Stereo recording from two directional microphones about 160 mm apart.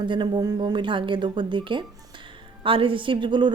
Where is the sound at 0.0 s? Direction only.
30° right (ahead or behind).